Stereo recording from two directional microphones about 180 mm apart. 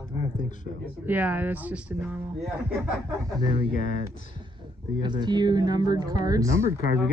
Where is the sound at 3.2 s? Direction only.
25° right (ahead or behind).